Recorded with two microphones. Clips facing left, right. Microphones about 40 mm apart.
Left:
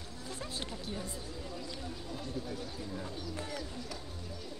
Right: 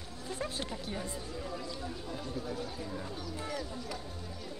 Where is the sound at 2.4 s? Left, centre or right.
Centre.